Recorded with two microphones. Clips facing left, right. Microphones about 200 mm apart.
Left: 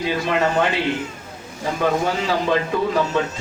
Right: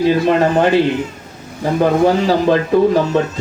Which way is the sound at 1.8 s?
40° right (ahead or behind).